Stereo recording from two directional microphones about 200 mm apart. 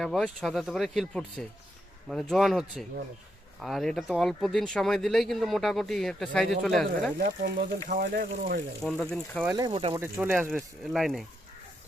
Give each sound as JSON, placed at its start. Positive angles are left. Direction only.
{"t": 0.0, "sound": "speech", "side_deg": 0}
{"t": 7.2, "sound": "speech", "side_deg": -55}
{"t": 8.0, "sound": "speech", "side_deg": -45}
{"t": 8.8, "sound": "speech", "side_deg": 0}
{"t": 9.4, "sound": "speech", "side_deg": -15}
{"t": 10.0, "sound": "speech", "side_deg": -10}